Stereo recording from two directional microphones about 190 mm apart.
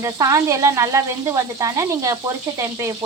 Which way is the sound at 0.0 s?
15° right (ahead or behind).